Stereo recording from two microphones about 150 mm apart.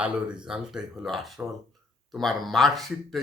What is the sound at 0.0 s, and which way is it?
Speech, 5° right (ahead or behind).